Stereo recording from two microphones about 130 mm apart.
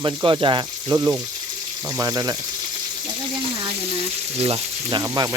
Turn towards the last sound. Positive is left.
turn(degrees=-25)  # may be behind; listen again after turning